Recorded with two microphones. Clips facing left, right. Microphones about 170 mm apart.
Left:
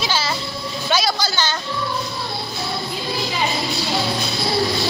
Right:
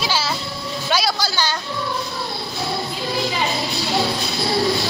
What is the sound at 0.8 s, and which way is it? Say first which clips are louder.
Vehicle: left 1 dB; 5° right (ahead or behind).